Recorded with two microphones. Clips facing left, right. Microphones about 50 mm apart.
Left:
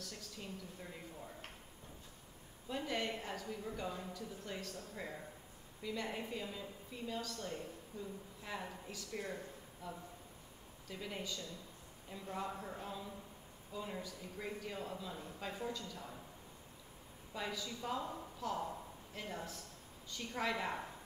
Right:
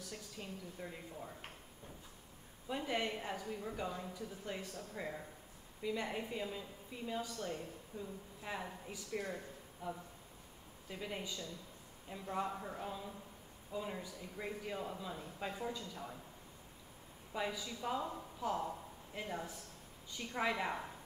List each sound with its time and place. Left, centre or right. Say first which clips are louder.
0.0 s a sound: right 1 dB; centre
2.7 s a woman's voice: right 1 dB; centre
4.1 s speech: right 1 dB; centre
4.7 s a woman's voice: right 2 dB; centre; by 8.1 s right
8.4 s a woman's voice: right 2 dB; centre
17.3 s a woman's voice: right 2 dB; centre